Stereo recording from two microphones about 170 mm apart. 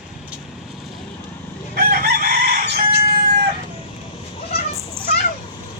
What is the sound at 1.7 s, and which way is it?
Chicken, 60° right (ahead or behind).